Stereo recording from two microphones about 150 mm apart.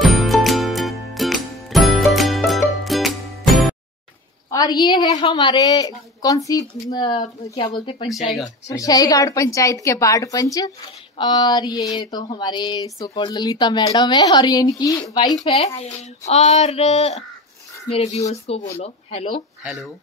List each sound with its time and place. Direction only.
0.0 s music: centre (ahead or behind)
4.5 s a woman's voice: 25° left (ahead or behind)
5.2 s a sound: 30° left (ahead or behind)
15.8 s child singing: 45° left (ahead or behind)
19.6 s speech: 5° right (ahead or behind)